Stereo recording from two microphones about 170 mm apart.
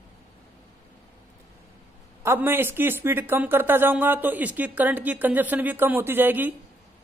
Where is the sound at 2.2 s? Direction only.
15° right (ahead or behind).